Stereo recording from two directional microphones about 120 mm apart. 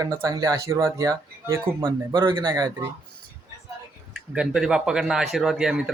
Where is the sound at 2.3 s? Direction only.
40° right (ahead or behind).